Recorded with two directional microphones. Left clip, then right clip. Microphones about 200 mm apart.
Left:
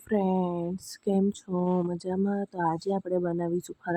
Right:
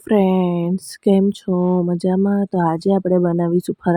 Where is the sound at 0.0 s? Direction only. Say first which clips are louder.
Right 11 dB; 30° right (ahead or behind).